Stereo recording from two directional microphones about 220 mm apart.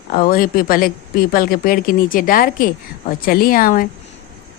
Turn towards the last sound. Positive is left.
turn(degrees=40)  # may be behind; listen again after turning